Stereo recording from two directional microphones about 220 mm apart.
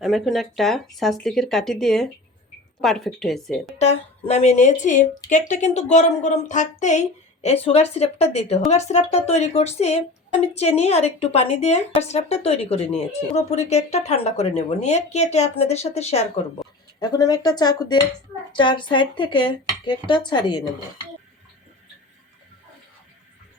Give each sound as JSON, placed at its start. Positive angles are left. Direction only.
{"t": 0.0, "sound": "speech", "side_deg": 0}
{"t": 3.8, "sound": "a woman's voice", "side_deg": 30}
{"t": 17.0, "sound": "a woman's voice", "side_deg": 15}